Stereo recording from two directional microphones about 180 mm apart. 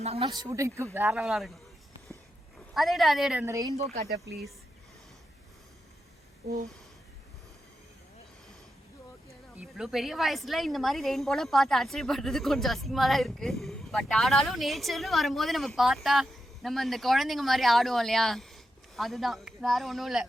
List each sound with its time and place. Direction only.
0.0 s speech: 35° right (ahead or behind)
0.3 s a woman's voice: 20° right (ahead or behind); by 1.5 s centre (ahead or behind)
2.7 s a woman's voice: centre (ahead or behind)
3.4 s speech: 20° right (ahead or behind)
9.6 s a woman's voice: centre (ahead or behind)